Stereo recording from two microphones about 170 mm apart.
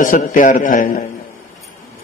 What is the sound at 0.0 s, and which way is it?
A man's voice, 50° left (ahead or behind).